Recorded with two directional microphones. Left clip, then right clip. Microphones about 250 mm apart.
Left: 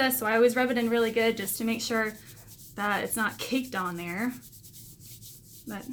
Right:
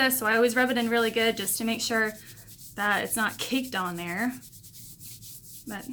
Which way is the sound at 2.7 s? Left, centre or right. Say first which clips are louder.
Right 2 dB; centre.